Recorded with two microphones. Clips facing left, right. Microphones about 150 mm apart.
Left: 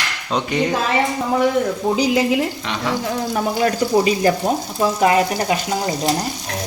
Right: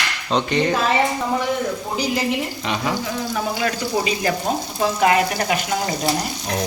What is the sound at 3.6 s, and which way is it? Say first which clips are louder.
Speech: left 9 dB; 40° left (ahead or behind).